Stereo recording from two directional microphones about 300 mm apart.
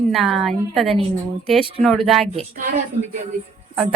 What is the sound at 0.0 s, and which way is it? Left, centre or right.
Speech, centre.